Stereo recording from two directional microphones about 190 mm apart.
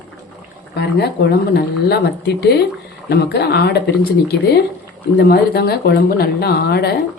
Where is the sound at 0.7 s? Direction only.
60° left (ahead or behind).